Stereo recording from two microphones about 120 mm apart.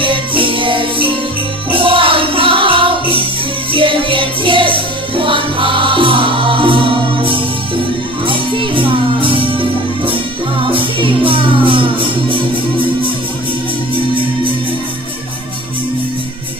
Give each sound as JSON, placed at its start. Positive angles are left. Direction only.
{"t": 0.0, "sound": "music", "side_deg": -45}